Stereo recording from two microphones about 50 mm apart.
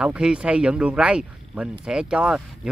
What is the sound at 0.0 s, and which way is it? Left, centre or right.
Speech, centre.